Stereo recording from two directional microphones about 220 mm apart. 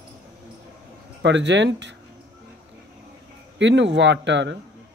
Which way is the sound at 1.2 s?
55° right (ahead or behind).